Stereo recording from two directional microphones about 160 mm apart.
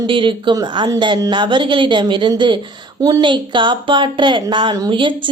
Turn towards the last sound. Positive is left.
turn(degrees=-30)  # may be behind; listen again after turning